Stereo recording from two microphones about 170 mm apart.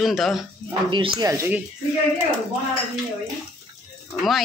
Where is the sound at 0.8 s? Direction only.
25° right (ahead or behind).